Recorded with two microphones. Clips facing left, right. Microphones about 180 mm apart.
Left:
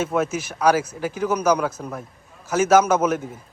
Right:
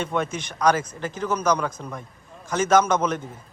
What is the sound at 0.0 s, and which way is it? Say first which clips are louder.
A man's voice: left 4 dB; 5° left (ahead or behind).